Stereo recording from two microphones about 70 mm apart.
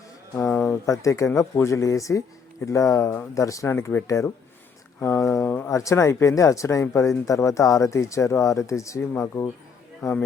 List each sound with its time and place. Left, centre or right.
0.3 s a sound: left
0.9 s speech: left
5.3 s speech: left
5.6 s speech: left
9.1 s speech: left
10.0 s speech: left